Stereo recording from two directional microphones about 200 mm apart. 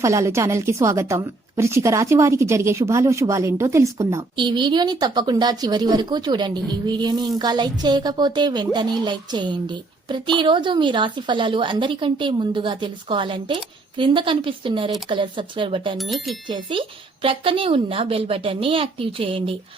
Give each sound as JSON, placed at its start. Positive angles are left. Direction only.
{"t": 0.0, "sound": "a woman's voice", "side_deg": -15}
{"t": 16.0, "sound": "speech", "side_deg": 0}
{"t": 16.5, "sound": "a woman's voice", "side_deg": -25}